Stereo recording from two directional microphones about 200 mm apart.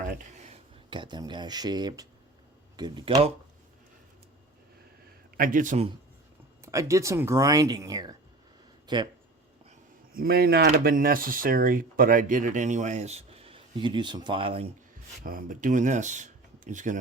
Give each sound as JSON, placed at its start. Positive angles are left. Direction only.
{"t": 0.0, "sound": "a sound", "side_deg": -40}
{"t": 0.9, "sound": "speech", "side_deg": -25}
{"t": 5.4, "sound": "speech", "side_deg": -40}
{"t": 6.6, "sound": "speech", "side_deg": -15}
{"t": 9.6, "sound": "speech", "side_deg": -45}
{"t": 15.2, "sound": "speech", "side_deg": -45}